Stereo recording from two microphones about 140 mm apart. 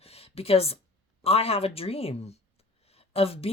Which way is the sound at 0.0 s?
45° left (ahead or behind).